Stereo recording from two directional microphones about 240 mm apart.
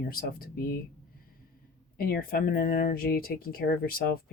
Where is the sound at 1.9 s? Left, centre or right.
Left.